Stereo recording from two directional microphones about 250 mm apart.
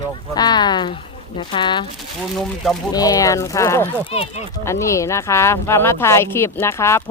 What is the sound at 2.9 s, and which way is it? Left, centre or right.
Speech, centre.